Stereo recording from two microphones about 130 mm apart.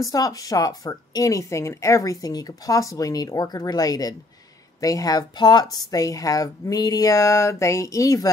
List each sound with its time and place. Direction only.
0.0 s a woman's voice: 30° left (ahead or behind)